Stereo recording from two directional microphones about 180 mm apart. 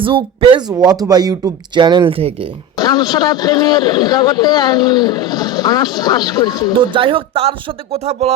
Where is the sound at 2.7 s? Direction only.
20° left (ahead or behind).